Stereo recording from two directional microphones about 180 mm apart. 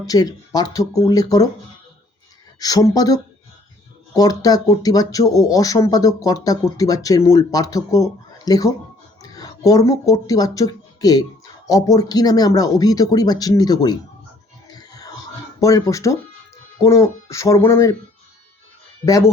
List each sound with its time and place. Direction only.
0.0 s speech: 20° left (ahead or behind)
2.6 s speech: 20° left (ahead or behind)
14.8 s music: 20° left (ahead or behind)
15.6 s speech: 20° left (ahead or behind)
19.0 s speech: 20° left (ahead or behind)